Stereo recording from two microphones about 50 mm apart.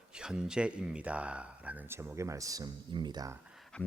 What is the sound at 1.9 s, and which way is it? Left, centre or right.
Speech, right.